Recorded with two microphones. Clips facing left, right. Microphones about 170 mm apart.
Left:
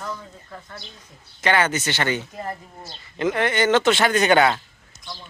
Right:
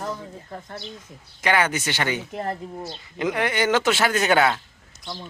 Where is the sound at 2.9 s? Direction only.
15° right (ahead or behind).